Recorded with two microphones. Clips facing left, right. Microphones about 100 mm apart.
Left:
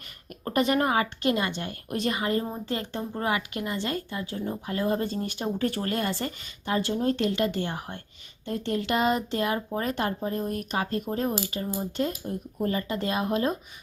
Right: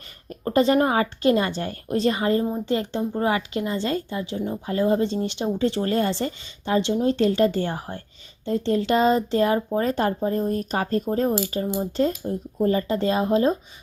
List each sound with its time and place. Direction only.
0.3 s a woman's voice: 30° right (ahead or behind)
11.6 s a woman's voice: 20° right (ahead or behind)